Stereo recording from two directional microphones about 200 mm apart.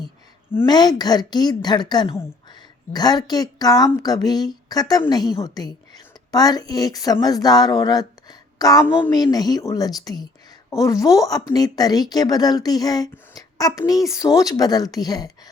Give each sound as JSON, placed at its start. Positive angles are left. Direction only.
{"t": 0.5, "sound": "speech", "side_deg": 20}